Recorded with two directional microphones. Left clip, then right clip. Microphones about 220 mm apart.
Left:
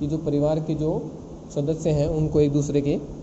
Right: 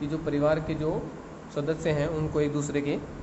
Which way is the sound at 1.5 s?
10° left (ahead or behind).